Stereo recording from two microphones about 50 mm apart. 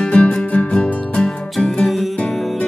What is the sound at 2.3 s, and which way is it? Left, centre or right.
Music, centre.